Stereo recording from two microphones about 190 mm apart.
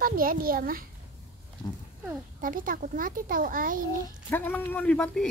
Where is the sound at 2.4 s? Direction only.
45° right (ahead or behind).